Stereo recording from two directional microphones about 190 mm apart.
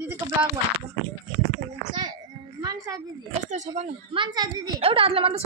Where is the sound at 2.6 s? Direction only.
20° right (ahead or behind).